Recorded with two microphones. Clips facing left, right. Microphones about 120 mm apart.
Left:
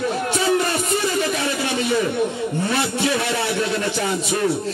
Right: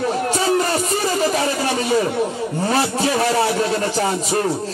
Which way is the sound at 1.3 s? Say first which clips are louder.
Right 3 dB; 40° right (ahead or behind).